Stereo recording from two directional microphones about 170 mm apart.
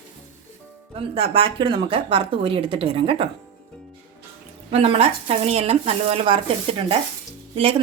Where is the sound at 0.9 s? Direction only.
35° right (ahead or behind).